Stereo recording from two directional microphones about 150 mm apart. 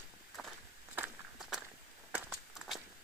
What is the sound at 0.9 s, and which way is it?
Walk, 10° right (ahead or behind).